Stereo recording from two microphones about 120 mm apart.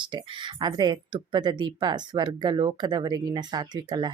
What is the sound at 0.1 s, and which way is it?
Speech, 40° right (ahead or behind).